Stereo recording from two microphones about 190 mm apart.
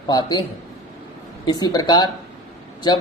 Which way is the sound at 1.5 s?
20° left (ahead or behind).